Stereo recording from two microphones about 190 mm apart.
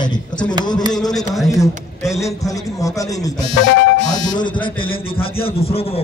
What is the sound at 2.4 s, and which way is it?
A man's voice, 15° left (ahead or behind).